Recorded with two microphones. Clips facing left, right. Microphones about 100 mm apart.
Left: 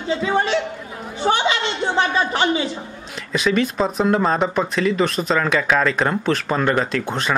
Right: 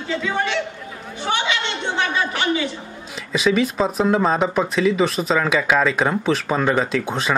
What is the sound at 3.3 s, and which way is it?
Speech, 5° right (ahead or behind).